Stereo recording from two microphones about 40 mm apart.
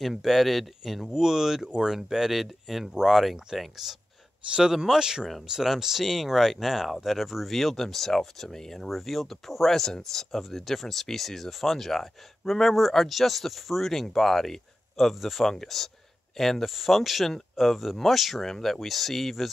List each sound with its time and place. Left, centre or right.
0.0 s speech: centre
4.5 s speech: right; by 19.5 s centre